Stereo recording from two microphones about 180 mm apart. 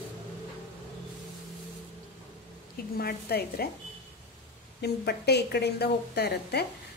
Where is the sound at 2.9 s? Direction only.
60° left (ahead or behind).